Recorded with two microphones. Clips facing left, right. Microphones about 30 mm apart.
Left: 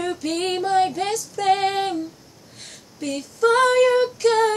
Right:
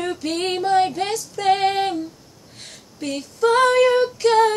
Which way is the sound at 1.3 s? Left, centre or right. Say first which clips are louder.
Right 2 dB; centre.